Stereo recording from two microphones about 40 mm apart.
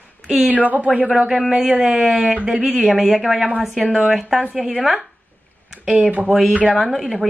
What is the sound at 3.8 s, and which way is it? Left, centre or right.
Speech, right.